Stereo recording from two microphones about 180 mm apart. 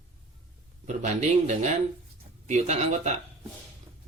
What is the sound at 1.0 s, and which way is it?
Speech, 40° right (ahead or behind).